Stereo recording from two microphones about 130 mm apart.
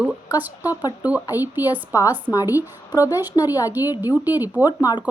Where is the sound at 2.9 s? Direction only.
30° left (ahead or behind).